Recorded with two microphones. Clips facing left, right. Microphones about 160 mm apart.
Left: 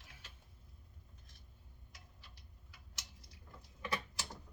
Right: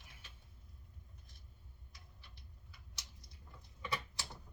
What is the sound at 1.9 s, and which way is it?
Tick-tock, 90° left.